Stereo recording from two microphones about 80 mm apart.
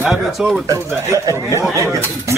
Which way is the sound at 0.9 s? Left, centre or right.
Right.